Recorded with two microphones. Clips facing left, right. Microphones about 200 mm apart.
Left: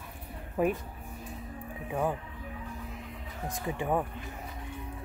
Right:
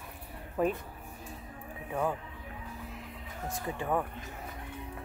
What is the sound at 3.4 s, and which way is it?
Speech, 15° left (ahead or behind).